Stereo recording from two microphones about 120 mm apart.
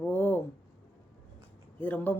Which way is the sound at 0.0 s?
15° left (ahead or behind).